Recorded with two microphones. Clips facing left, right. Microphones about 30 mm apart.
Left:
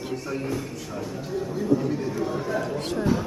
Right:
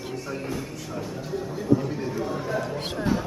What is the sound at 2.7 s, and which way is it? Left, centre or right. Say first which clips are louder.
Speech: left 2 dB; centre.